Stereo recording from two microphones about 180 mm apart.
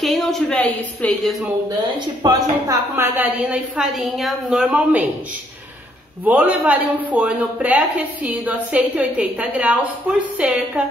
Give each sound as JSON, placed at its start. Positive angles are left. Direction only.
{"t": 0.0, "sound": "a woman's voice", "side_deg": 0}
{"t": 1.7, "sound": "a woman's voice", "side_deg": -20}
{"t": 3.0, "sound": "a woman's voice", "side_deg": -10}
{"t": 6.2, "sound": "a woman's voice", "side_deg": -10}